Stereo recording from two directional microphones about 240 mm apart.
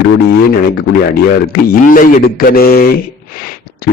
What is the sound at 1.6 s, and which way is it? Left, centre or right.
Speech, left.